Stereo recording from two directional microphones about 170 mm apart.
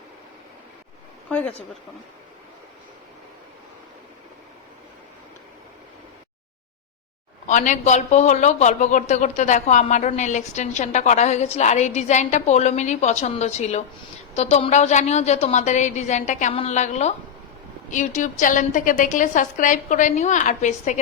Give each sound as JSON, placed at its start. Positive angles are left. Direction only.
{"t": 1.3, "sound": "speech", "side_deg": 5}
{"t": 7.4, "sound": "a man's voice", "side_deg": 45}